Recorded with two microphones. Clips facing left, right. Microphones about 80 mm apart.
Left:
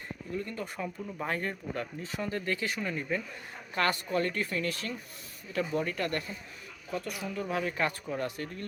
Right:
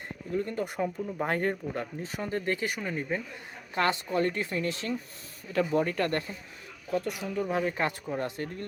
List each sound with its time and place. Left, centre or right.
0.3 s speech: right
2.6 s speech: centre
5.5 s speech: right
6.9 s speech: right